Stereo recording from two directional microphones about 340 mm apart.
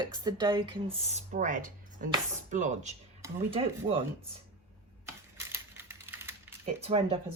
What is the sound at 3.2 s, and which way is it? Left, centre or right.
Speech, centre.